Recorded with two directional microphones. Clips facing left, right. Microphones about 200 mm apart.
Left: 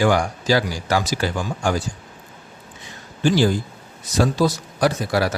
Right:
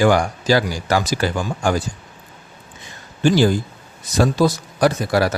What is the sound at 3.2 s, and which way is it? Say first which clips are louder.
A man's voice: right 2 dB; 55° right (ahead or behind).